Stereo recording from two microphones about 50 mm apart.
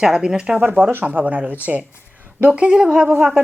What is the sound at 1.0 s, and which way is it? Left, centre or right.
Speech, right.